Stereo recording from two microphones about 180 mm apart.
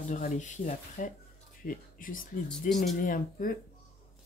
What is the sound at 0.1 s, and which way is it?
Speech, 45° left (ahead or behind).